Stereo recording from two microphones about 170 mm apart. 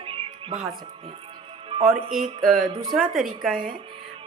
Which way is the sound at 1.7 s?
30° right (ahead or behind).